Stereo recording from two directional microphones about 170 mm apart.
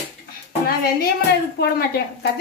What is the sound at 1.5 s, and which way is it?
Speech, 70° left (ahead or behind).